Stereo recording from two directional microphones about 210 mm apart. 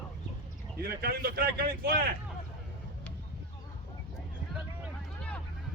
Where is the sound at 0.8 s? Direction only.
45° right (ahead or behind).